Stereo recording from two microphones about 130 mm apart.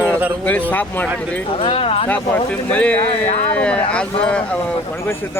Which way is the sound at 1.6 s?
45° left (ahead or behind).